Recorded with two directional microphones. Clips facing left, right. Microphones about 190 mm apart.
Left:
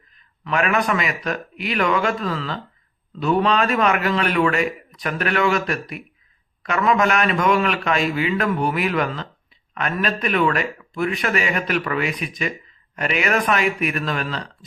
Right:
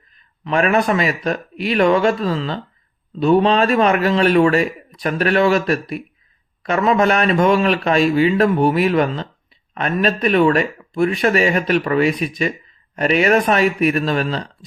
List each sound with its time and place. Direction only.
0.4 s a man's voice: 30° right (ahead or behind)